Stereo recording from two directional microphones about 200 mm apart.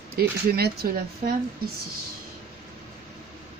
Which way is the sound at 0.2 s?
50° right (ahead or behind).